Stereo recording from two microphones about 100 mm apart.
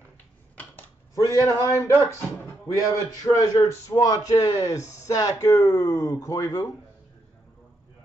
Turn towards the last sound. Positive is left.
turn(degrees=35)  # may be behind; listen again after turning